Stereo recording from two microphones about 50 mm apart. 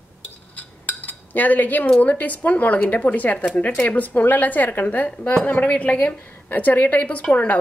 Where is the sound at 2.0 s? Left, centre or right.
Left.